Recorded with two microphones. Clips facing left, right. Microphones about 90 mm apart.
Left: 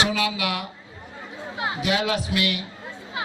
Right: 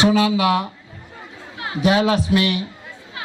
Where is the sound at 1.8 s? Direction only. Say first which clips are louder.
Right 8 dB; 35° right (ahead or behind).